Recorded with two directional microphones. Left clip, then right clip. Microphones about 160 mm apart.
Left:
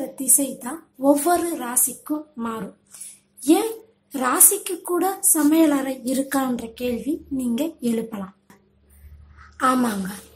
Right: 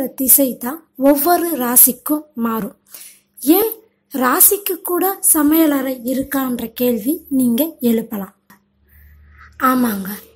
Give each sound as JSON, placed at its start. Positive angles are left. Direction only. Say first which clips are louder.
{"t": 0.1, "sound": "a woman's voice", "louder": "right 7 dB", "side_deg": -40}
{"t": 0.9, "sound": "a woman's voice", "louder": "right 5 dB", "side_deg": -30}
{"t": 6.5, "sound": "a woman's voice", "louder": "right 8 dB", "side_deg": -35}
{"t": 9.4, "sound": "a woman's voice", "louder": "right 4 dB", "side_deg": -10}